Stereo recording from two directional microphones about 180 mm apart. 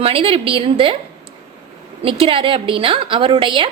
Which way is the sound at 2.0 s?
30° right (ahead or behind).